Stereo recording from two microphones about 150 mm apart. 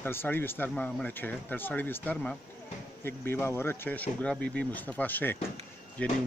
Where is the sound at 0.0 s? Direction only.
15° left (ahead or behind).